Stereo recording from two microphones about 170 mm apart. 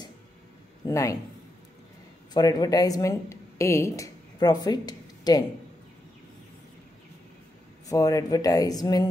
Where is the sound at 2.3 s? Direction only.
20° left (ahead or behind).